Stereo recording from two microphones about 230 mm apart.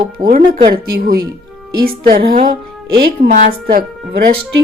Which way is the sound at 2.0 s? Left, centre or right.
Right.